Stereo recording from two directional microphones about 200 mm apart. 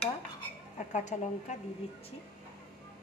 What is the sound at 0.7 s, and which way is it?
Speech, 35° left (ahead or behind).